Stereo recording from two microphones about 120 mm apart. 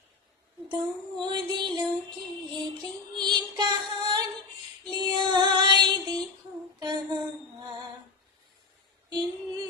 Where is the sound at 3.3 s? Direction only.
40° right (ahead or behind).